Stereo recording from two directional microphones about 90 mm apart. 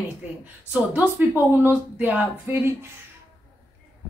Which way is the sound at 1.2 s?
20° right (ahead or behind).